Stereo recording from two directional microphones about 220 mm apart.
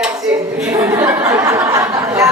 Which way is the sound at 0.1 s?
15° right (ahead or behind).